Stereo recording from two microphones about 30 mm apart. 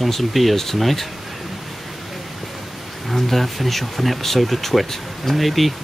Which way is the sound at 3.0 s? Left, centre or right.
Centre.